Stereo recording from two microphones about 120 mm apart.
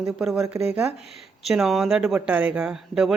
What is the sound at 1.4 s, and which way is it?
Speech, centre (ahead or behind).